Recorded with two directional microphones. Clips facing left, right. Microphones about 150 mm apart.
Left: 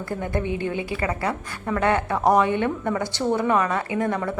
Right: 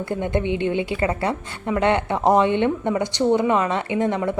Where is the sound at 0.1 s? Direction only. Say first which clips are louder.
Right 3 dB; 20° right (ahead or behind).